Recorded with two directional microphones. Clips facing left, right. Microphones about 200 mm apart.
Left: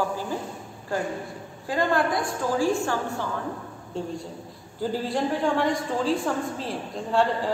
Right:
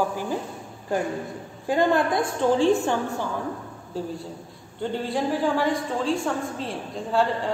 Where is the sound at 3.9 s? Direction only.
5° right (ahead or behind).